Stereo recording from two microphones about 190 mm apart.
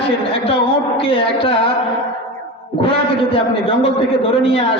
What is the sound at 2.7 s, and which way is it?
A man's voice, 30° left (ahead or behind).